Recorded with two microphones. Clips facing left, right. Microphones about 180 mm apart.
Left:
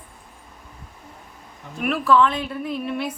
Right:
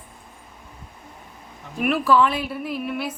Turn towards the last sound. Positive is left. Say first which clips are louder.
# left 1 dB
turn(degrees=-5)  # may be behind; listen again after turning